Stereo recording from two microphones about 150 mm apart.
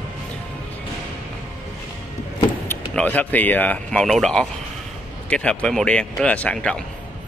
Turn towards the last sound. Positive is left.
turn(degrees=5)  # may be behind; listen again after turning